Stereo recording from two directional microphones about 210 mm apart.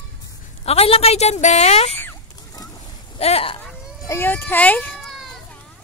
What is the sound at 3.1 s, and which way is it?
Speech, 30° left (ahead or behind).